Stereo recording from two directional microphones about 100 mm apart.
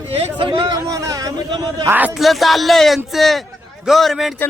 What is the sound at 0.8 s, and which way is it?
A man's voice, 35° right (ahead or behind).